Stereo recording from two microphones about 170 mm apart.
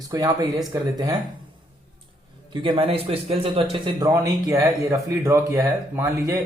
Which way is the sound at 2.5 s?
30° right (ahead or behind).